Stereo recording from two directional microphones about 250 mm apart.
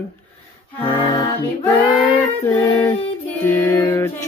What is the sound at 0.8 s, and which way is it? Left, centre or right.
Mantra, centre.